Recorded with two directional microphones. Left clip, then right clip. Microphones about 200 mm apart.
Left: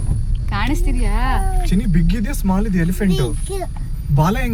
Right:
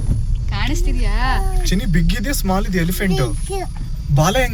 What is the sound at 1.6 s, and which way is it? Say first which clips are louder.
Speech: right 1 dB; 40° right (ahead or behind).